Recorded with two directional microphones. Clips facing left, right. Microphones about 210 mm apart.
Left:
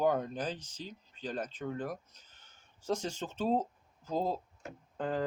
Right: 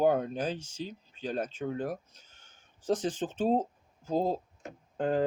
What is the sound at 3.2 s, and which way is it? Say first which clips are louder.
Speech: right 4 dB; 50° right (ahead or behind).